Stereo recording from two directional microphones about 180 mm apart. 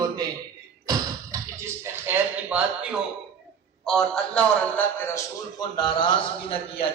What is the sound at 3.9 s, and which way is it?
A man's voice, 5° left (ahead or behind).